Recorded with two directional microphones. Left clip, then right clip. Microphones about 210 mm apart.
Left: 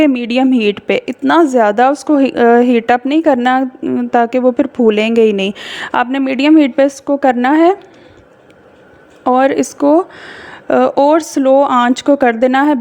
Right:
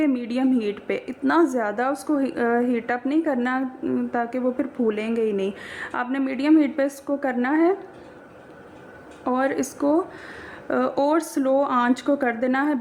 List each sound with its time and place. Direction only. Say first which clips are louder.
0.0 s a woman's voice: left 11 dB; 40° left (ahead or behind)
9.2 s a woman's voice: left 12 dB; 35° left (ahead or behind)